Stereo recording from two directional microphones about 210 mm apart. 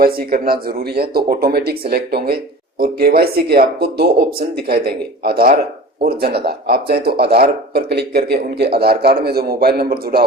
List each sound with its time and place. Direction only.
0.0 s speech: 45° right (ahead or behind)